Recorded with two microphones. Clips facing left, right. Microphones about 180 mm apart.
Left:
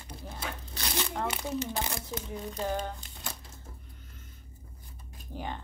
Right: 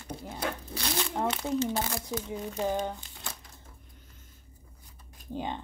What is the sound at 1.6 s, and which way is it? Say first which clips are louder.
Speech: right 4 dB; 20° left (ahead or behind).